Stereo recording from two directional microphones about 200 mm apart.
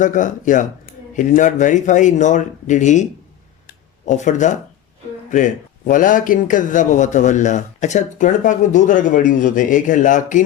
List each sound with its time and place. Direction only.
0.0 s speech: 40° left (ahead or behind)